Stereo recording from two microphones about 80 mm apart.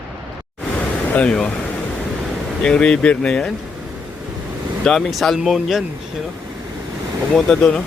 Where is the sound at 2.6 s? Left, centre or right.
Centre.